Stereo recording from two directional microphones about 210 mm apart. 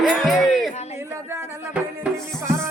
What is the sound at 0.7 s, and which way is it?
Speech, 30° left (ahead or behind).